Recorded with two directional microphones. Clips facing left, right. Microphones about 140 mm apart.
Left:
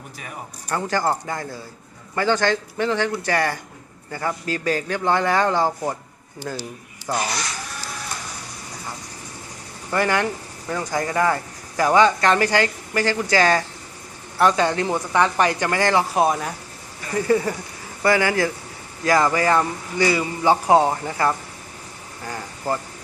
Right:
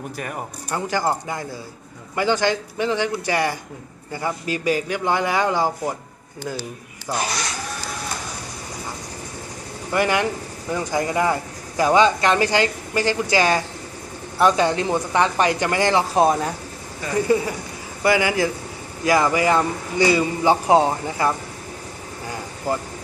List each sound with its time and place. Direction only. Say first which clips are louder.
0.7 s speech: even; 15° right (ahead or behind)
7.1 s speech: left 1 dB; 10° right (ahead or behind)
9.9 s speech: right 1 dB; 15° right (ahead or behind)
17.2 s speech: left 3 dB; 15° right (ahead or behind)